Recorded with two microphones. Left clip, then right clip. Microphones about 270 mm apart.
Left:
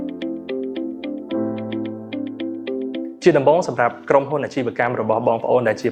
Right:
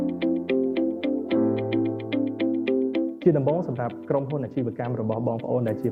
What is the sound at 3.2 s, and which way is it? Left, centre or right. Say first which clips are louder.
Speech: left 9 dB; centre.